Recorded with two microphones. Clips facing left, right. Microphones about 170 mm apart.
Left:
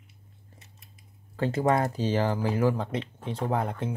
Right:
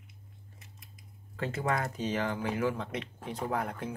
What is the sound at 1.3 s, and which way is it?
Speech, 35° left (ahead or behind).